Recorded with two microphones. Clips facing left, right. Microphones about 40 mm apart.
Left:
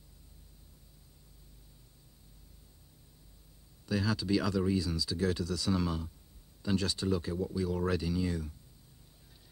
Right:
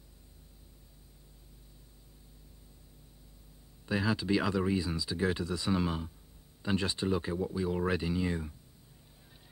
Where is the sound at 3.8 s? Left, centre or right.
Right.